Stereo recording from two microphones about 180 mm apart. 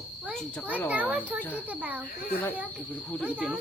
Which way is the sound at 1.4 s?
10° left (ahead or behind).